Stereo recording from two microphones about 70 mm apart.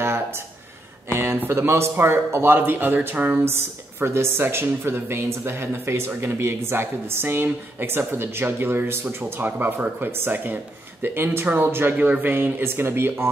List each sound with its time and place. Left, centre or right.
1.1 s a sound: right
1.5 s speech: right
3.4 s speech: right